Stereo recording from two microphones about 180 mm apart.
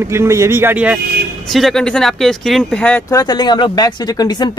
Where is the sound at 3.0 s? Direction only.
20° left (ahead or behind).